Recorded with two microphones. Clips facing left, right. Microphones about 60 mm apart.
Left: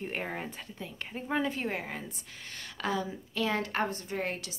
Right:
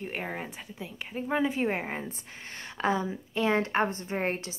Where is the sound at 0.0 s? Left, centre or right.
Centre.